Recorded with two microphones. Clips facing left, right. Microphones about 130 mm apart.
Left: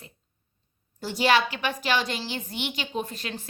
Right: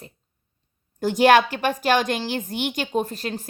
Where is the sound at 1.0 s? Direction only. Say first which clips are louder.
Right 7 dB; 50° right (ahead or behind).